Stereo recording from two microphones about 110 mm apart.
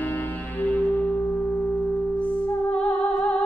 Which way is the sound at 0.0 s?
15° left (ahead or behind).